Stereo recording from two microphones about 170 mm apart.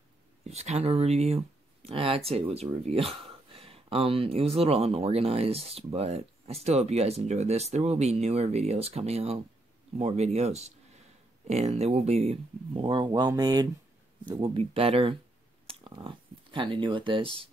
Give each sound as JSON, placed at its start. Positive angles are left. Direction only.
{"t": 0.4, "sound": "speech", "side_deg": -40}